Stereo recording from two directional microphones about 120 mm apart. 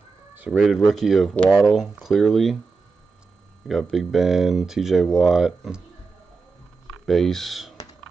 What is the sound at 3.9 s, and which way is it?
Speech, 5° right (ahead or behind).